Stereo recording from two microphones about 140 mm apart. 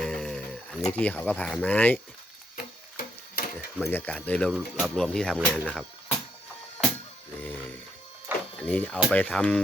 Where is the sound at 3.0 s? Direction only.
90° left.